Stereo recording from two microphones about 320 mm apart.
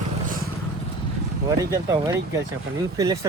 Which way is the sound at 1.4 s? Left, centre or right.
Centre.